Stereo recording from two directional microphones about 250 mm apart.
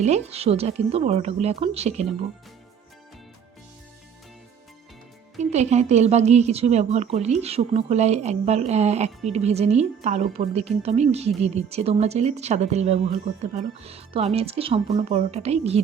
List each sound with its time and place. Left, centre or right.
0.0 s a woman's voice: right
5.4 s a woman's voice: right